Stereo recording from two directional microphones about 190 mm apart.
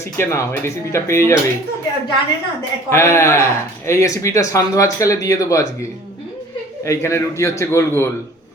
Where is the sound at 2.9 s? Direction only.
15° left (ahead or behind).